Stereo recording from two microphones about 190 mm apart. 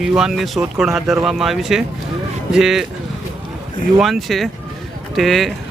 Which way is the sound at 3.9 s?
Centre (ahead or behind).